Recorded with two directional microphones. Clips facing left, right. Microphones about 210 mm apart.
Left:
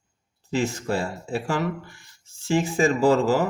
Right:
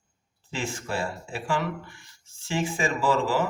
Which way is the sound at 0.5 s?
40° left (ahead or behind).